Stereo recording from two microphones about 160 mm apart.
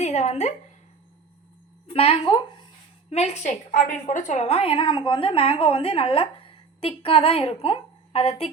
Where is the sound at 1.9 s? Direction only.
35° left (ahead or behind).